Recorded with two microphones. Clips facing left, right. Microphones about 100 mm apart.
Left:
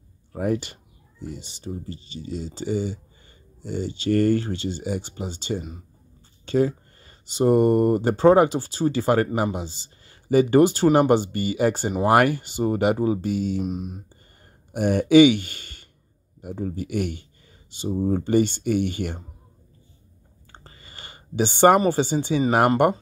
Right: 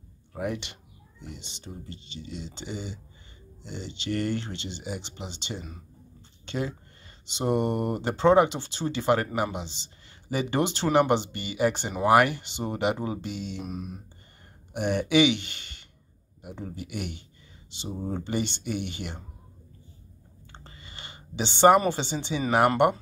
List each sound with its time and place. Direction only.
0.3 s speech: 40° left (ahead or behind)
14.7 s speech: 45° left (ahead or behind)
20.6 s a sound: 45° left (ahead or behind)
21.7 s speech: 45° left (ahead or behind)